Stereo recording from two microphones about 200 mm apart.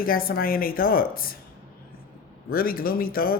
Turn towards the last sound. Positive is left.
turn(degrees=45)  # may be behind; listen again after turning